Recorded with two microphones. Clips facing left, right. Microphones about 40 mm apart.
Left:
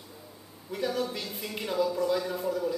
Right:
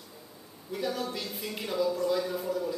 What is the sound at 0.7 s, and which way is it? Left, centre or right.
A woman's voice, centre.